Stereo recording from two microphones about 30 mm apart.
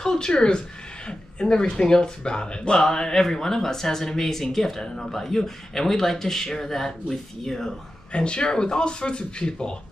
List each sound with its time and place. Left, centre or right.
0.0 s a sound: left
0.3 s speech: left; by 7.7 s centre
8.1 s speech: left